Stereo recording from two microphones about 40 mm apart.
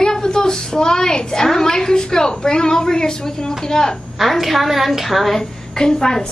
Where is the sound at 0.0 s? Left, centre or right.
Centre.